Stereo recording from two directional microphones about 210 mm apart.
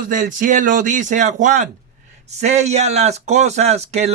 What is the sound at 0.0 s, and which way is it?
Speech, 40° right (ahead or behind).